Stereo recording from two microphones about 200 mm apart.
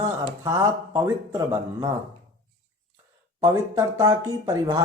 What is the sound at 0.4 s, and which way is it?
Speech, 15° right (ahead or behind).